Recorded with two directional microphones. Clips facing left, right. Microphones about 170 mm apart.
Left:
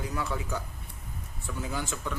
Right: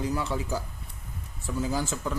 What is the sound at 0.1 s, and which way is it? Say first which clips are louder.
Speech: right 3 dB; 30° right (ahead or behind).